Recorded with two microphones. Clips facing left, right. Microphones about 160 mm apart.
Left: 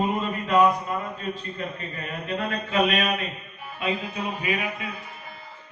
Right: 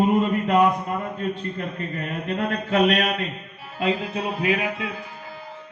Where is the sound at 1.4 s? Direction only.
55° right (ahead or behind); by 4.9 s 90° right.